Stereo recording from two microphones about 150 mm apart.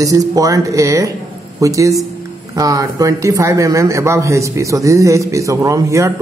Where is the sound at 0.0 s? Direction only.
25° right (ahead or behind).